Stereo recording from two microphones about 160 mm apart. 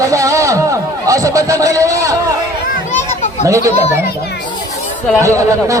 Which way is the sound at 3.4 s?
20° right (ahead or behind).